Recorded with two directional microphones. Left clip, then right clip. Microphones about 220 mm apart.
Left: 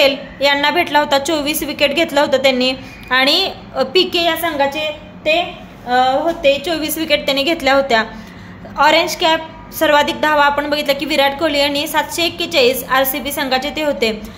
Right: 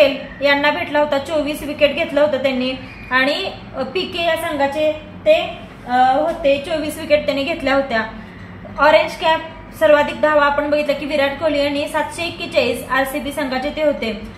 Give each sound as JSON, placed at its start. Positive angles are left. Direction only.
{"t": 0.0, "sound": "a woman's voice", "side_deg": 50}
{"t": 5.9, "sound": "a woman's voice", "side_deg": 45}